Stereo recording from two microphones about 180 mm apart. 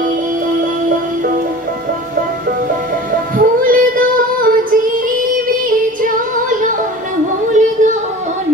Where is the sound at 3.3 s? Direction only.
50° right (ahead or behind).